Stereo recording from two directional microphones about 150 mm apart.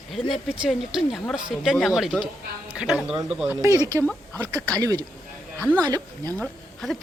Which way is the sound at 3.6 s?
25° right (ahead or behind).